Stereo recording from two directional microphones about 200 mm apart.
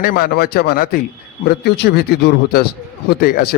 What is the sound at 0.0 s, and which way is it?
Speech, 50° left (ahead or behind).